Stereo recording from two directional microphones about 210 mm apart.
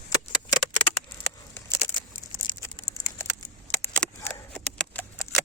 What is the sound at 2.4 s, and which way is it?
Computer keyboard, 15° left (ahead or behind).